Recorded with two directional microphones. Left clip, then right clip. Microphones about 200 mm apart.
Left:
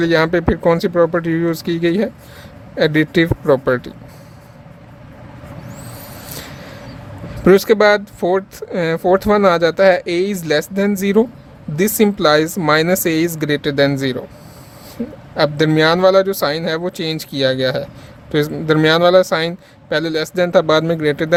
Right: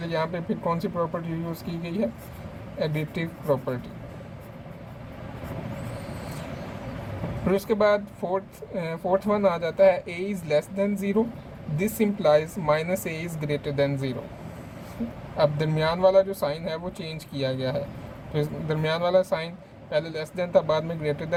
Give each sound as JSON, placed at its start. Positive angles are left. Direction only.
{"t": 0.0, "sound": "speech", "side_deg": 50}
{"t": 7.4, "sound": "speech", "side_deg": 55}
{"t": 15.4, "sound": "speech", "side_deg": 45}